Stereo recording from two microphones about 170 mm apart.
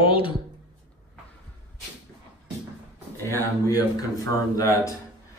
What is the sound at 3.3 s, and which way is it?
Speech, 20° left (ahead or behind).